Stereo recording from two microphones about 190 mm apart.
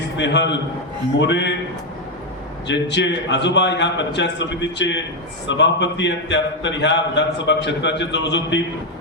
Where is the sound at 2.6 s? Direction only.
70° left (ahead or behind).